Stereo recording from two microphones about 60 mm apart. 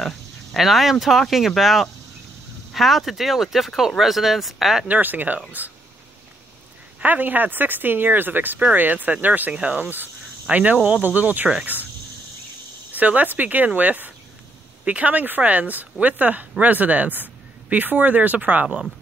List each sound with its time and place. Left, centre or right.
0.0 s speech: centre
4.8 s speech: right
7.0 s speech: right
12.9 s speech: right